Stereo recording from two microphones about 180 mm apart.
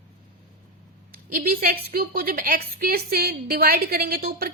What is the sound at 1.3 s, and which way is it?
A woman's voice, 55° right (ahead or behind).